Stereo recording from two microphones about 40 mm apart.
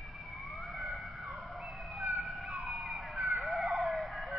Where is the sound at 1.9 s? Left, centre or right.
Centre.